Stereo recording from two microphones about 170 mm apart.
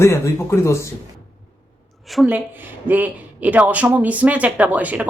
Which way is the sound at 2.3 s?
10° right (ahead or behind).